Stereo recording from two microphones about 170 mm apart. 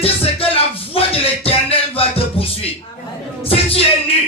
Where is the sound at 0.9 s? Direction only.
35° left (ahead or behind).